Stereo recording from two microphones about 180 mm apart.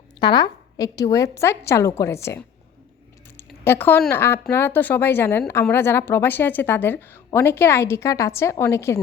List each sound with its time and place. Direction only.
0.2 s a woman's voice: 25° left (ahead or behind)
3.3 s a sound: 15° left (ahead or behind)
4.1 s a woman's voice: 15° left (ahead or behind)